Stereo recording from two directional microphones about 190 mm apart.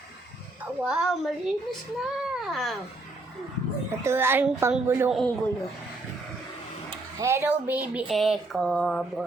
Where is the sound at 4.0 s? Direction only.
15° right (ahead or behind).